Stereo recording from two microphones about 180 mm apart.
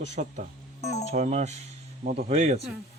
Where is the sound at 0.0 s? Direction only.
40° right (ahead or behind).